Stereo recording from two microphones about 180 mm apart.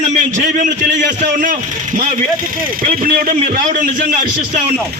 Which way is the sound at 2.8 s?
50° right (ahead or behind).